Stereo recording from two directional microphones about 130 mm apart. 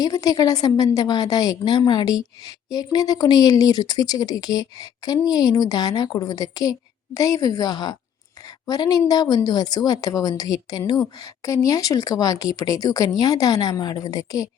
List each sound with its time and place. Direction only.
0.0 s speech: 30° left (ahead or behind)